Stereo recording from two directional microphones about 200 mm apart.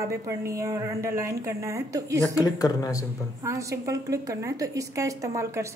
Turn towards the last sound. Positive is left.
turn(degrees=-15)  # may be behind; listen again after turning